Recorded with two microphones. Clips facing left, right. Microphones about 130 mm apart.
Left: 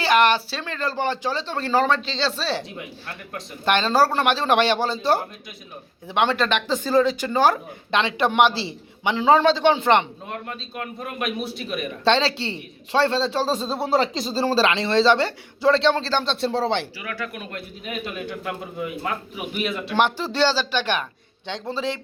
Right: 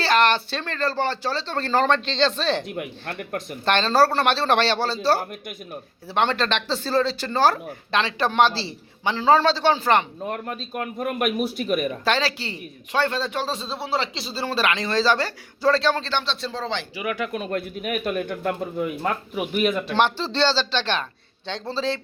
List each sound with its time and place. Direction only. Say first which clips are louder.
0.0 s speech: left 1 dB; 15° left (ahead or behind)
2.6 s speech: right 5 dB; 55° right (ahead or behind)
3.7 s speech: even; 10° left (ahead or behind)
10.2 s a man's voice: right 3 dB; 40° right (ahead or behind)
12.0 s a man's voice: left 3 dB; 25° left (ahead or behind)
16.2 s speech: left 6 dB; 55° left (ahead or behind)
17.0 s speech: right 5 dB; 20° right (ahead or behind)
18.0 s speech: right 5 dB; 55° right (ahead or behind)
19.9 s speech: even; 15° left (ahead or behind)